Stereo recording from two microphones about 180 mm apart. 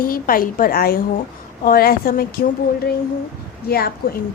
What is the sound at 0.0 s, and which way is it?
A woman's voice, 55° left (ahead or behind).